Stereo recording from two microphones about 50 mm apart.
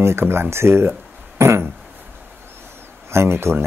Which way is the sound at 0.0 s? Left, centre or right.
Right.